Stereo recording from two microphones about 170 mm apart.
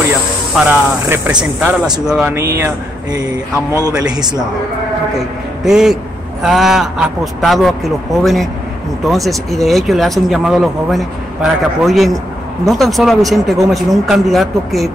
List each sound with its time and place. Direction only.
0.6 s speech: 10° right (ahead or behind)
2.6 s a sound: 20° right (ahead or behind)
3.5 s a man's voice: 15° left (ahead or behind)
4.1 s a man's voice: 25° right (ahead or behind)
5.7 s speech: 5° right (ahead or behind)